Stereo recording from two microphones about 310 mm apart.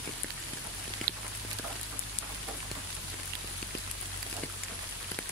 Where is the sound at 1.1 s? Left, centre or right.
Right.